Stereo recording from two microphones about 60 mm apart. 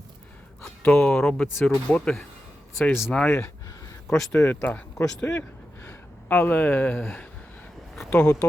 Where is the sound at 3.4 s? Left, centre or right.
Left.